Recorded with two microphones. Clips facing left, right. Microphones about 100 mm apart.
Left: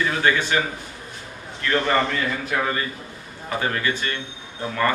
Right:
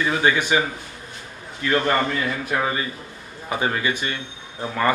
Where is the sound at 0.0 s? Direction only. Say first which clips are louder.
Right 1 dB; 15° right (ahead or behind).